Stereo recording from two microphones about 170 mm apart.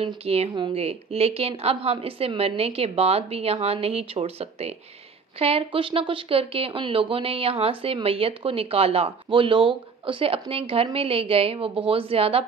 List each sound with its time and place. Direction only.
0.0 s speech: 35° right (ahead or behind)